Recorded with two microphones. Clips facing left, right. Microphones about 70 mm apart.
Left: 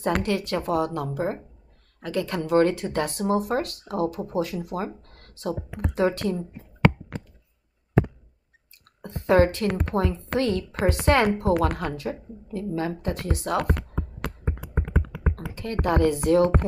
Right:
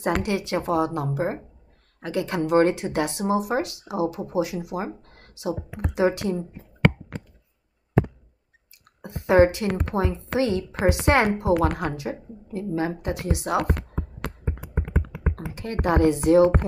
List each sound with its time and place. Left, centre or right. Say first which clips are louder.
0.2 s speech: even; right
9.3 s speech: right 2 dB; centre
15.3 s speech: even; right